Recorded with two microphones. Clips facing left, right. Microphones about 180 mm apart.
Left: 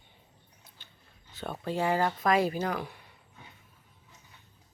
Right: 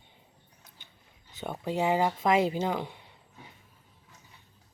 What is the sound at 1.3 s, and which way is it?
Speech, 20° right (ahead or behind).